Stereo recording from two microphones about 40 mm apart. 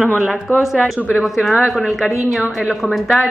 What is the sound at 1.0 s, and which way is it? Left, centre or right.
Speech, right.